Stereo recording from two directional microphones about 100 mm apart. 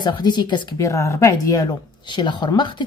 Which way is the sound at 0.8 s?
30° left (ahead or behind).